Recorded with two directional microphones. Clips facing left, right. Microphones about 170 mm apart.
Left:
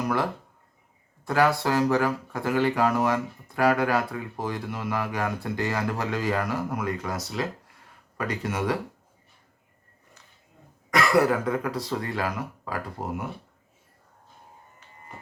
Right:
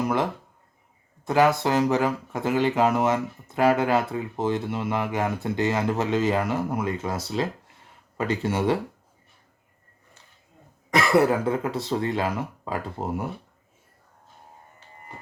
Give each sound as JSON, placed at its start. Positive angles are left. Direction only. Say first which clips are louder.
{"t": 1.2, "sound": "speech", "louder": "right 2 dB", "side_deg": -20}
{"t": 10.9, "sound": "speech", "louder": "right 2 dB", "side_deg": -25}